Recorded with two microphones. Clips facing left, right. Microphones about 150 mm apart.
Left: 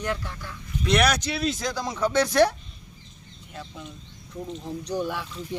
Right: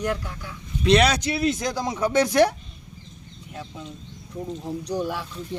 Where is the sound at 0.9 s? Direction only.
25° right (ahead or behind).